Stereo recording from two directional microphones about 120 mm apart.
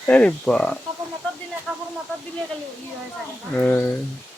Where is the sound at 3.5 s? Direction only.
15° left (ahead or behind).